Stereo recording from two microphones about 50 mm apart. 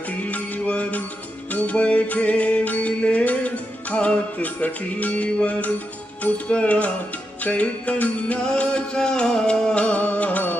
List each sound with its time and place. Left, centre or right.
0.3 s music: left; by 9.7 s centre
9.7 s music: left